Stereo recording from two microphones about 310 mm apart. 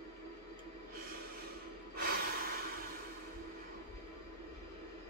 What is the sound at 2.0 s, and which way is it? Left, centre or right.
Snort, right.